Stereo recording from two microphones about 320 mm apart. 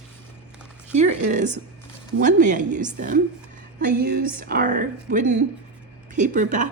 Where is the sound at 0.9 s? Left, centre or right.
Right.